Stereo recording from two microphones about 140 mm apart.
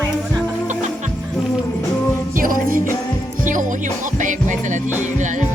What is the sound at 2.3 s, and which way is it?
Music, 80° right.